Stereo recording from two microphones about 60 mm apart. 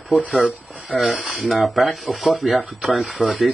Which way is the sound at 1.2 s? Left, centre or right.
Centre.